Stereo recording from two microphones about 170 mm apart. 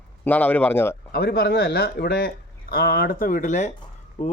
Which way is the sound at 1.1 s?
65° left (ahead or behind).